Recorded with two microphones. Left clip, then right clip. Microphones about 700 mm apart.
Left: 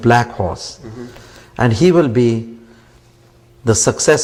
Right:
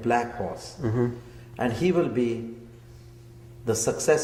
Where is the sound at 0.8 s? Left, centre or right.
Right.